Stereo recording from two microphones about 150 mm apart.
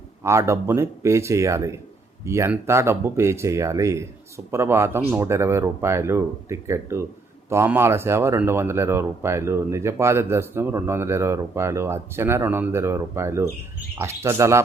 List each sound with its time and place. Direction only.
0.2 s speech: 20° right (ahead or behind)